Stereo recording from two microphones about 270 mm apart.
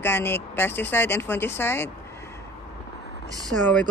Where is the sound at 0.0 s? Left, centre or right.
Centre.